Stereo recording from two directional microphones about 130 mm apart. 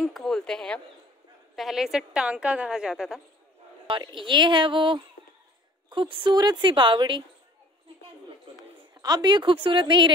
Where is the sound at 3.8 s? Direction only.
40° right (ahead or behind).